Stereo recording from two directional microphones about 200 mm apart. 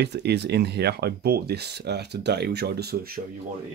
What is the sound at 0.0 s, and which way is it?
Speech, 55° right (ahead or behind).